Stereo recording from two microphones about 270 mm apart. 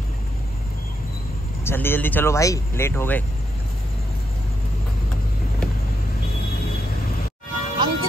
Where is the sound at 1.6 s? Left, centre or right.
Centre.